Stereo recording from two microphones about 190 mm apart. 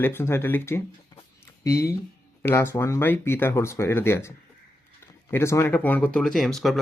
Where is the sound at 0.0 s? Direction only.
10° left (ahead or behind).